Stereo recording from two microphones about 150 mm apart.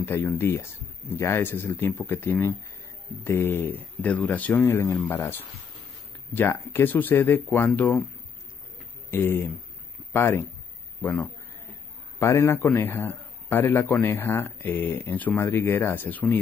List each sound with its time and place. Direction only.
0.0 s a man's voice: 15° left (ahead or behind)
9.1 s a man's voice: 15° left (ahead or behind)
12.2 s a man's voice: 20° left (ahead or behind)